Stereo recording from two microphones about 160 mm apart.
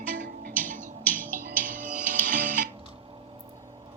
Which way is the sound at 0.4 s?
60° right (ahead or behind).